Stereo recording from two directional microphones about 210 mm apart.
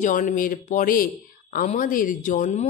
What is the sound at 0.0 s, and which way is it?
Speech, 40° left (ahead or behind).